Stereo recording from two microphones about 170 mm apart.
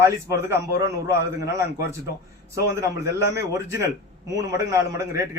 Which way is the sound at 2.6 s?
15° right (ahead or behind).